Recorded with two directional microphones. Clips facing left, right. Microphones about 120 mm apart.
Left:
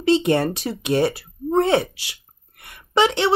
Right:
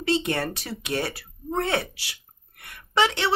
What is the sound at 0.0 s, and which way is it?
Speech, 25° left (ahead or behind).